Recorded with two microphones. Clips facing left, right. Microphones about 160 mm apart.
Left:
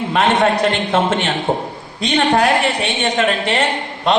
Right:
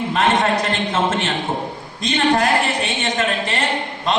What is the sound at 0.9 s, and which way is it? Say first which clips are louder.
A woman's voice: left 3 dB; 65° left (ahead or behind).